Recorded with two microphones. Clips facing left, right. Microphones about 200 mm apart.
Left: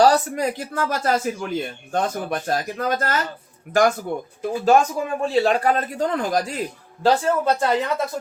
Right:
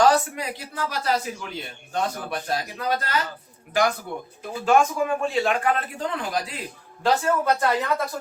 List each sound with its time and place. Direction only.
0.0 s speech: 40° left (ahead or behind)
4.6 s speech: 35° left (ahead or behind)
7.0 s speech: 30° left (ahead or behind)